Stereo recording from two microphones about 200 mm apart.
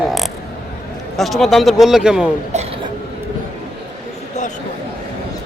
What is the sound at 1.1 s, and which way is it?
A man's voice, centre (ahead or behind).